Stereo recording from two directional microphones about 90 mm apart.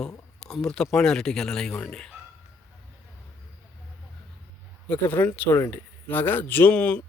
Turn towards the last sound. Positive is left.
turn(degrees=15)  # may be behind; listen again after turning